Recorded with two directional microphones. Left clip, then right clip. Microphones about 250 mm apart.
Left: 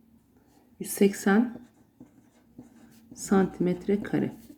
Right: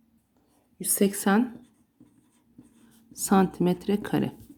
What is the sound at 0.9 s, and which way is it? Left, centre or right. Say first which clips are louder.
Speech: left 1 dB; right.